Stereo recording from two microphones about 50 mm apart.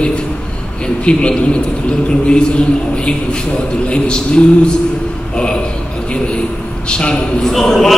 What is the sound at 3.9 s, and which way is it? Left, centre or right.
Speech, centre.